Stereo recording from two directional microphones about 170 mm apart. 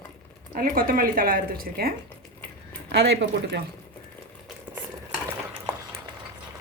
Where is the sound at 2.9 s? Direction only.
80° right.